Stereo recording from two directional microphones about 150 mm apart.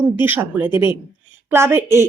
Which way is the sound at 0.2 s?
15° right (ahead or behind).